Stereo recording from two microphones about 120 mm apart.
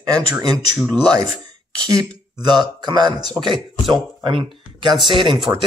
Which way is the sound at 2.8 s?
35° right (ahead or behind).